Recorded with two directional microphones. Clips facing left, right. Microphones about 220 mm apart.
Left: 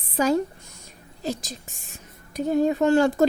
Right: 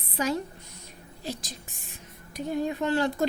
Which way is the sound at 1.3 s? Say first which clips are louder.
Left 6 dB; 45° left (ahead or behind).